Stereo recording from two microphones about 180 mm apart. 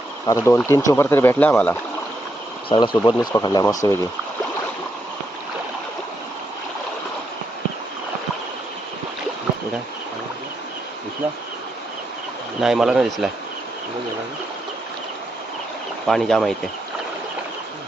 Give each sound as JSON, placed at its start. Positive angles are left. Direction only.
{"t": 0.3, "sound": "speech", "side_deg": 15}
{"t": 2.6, "sound": "speech", "side_deg": 25}
{"t": 12.5, "sound": "speech", "side_deg": 0}
{"t": 16.0, "sound": "speech", "side_deg": 0}